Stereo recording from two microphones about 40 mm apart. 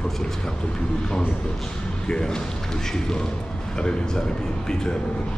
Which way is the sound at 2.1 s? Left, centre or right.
Centre.